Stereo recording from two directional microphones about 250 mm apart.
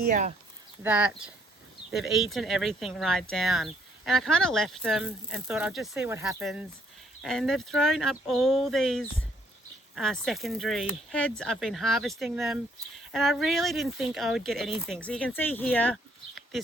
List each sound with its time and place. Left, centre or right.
0.0 s speech: right
0.8 s speech: centre